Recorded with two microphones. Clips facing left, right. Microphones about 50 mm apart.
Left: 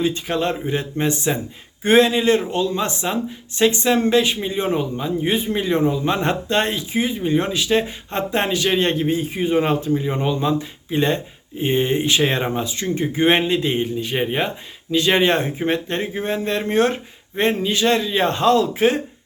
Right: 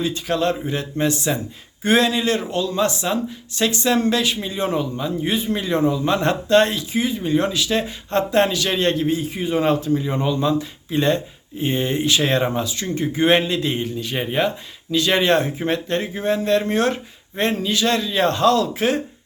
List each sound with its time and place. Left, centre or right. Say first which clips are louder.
0.0 s speech: even; left